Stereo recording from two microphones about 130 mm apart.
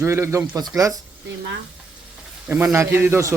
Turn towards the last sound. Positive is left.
turn(degrees=-20)  # may be behind; listen again after turning